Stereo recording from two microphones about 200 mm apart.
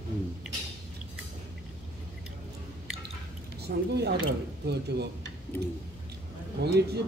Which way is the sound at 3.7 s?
55° right (ahead or behind).